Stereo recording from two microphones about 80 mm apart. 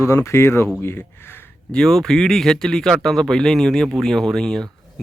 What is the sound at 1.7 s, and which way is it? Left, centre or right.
Speech, centre.